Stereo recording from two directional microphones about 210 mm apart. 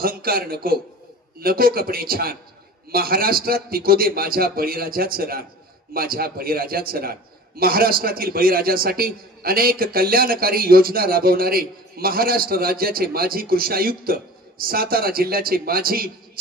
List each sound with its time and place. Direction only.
0.0 s a man's voice: 45° right (ahead or behind)